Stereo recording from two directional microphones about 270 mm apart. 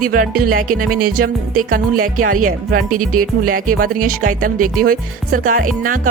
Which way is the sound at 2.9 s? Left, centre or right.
Right.